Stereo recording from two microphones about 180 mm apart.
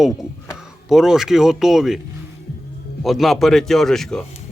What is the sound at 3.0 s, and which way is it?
Speech, centre (ahead or behind).